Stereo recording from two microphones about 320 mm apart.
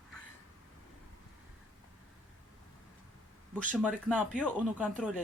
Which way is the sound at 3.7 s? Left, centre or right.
Centre.